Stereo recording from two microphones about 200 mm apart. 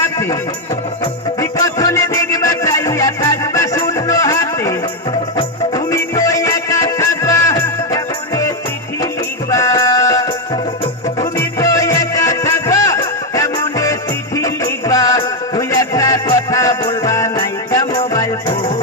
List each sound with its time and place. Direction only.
1.4 s music: 15° left (ahead or behind)
11.3 s music: 15° left (ahead or behind)